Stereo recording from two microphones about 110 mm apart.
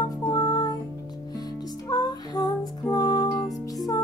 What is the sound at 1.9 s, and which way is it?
Music, 35° left (ahead or behind).